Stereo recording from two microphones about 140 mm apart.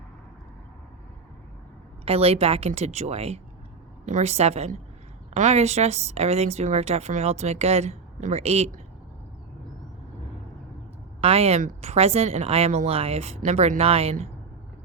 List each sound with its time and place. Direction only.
2.0 s speech: 45° right (ahead or behind)
11.2 s speech: 45° right (ahead or behind)